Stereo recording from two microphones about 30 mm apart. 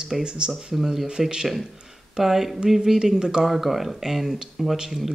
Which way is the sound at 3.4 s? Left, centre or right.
Centre.